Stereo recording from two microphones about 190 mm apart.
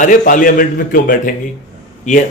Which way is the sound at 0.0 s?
45° left (ahead or behind).